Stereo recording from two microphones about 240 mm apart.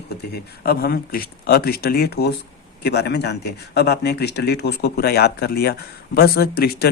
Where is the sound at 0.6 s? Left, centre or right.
Left.